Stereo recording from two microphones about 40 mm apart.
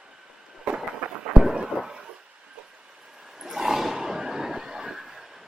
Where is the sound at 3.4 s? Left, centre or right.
Centre.